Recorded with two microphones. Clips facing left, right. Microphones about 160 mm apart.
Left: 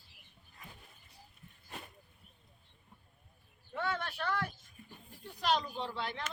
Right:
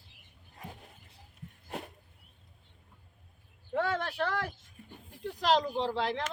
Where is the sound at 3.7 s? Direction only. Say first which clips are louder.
Right 6 dB; 90° right.